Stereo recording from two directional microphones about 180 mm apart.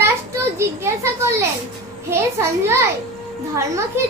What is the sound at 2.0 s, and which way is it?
Child singing, 15° right (ahead or behind).